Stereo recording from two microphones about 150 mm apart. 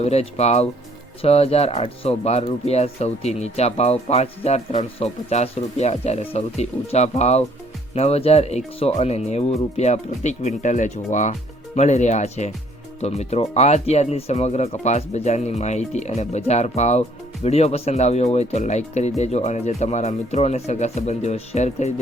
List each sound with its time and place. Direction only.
0.0 s speech: 45° left (ahead or behind)